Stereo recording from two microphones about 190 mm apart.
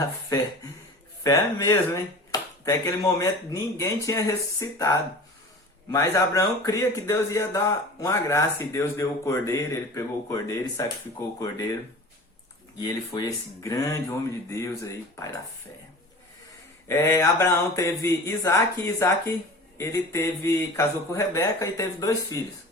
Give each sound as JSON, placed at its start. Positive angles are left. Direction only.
{"t": 0.0, "sound": "speech", "side_deg": 15}
{"t": 13.1, "sound": "speech", "side_deg": 15}
{"t": 16.9, "sound": "speech", "side_deg": 15}